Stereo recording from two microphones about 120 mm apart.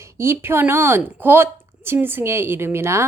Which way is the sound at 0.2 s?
20° right (ahead or behind).